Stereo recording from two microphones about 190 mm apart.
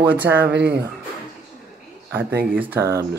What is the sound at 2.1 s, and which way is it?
Speech, 10° right (ahead or behind).